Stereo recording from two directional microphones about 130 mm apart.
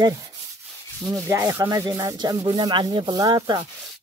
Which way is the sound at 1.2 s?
20° right (ahead or behind).